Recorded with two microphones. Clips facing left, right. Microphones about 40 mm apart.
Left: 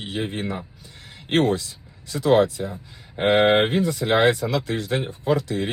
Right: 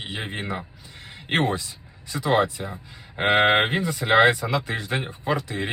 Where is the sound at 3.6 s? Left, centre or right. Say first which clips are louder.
Left 2 dB; right.